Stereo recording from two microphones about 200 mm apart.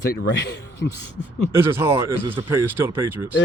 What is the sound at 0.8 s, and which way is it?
Speech, 60° left (ahead or behind).